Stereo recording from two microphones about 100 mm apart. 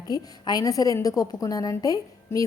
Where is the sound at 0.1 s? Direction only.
40° left (ahead or behind).